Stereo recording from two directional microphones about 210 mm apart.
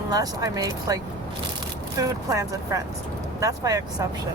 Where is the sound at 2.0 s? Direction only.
15° right (ahead or behind).